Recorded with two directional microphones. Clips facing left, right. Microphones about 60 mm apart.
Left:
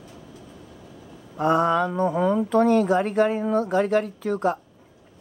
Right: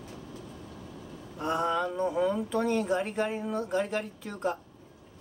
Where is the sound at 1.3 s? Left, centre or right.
Left.